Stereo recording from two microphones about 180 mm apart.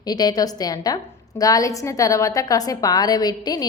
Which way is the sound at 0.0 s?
20° left (ahead or behind).